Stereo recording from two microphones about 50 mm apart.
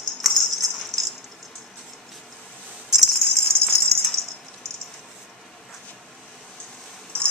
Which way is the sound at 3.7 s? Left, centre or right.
Centre.